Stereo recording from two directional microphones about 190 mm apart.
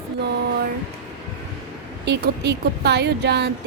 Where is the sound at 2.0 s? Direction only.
65° right (ahead or behind).